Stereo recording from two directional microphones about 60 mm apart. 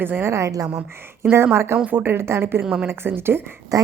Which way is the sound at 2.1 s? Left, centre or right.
Right.